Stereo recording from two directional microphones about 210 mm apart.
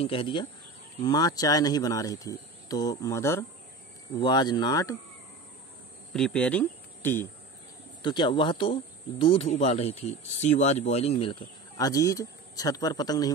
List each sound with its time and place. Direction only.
0.0 s speech: 25° left (ahead or behind)
6.1 s speech: 5° left (ahead or behind)
8.0 s speech: 20° left (ahead or behind)